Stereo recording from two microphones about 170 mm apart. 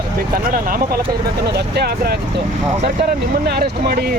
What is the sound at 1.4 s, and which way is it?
Speech, 70° right (ahead or behind).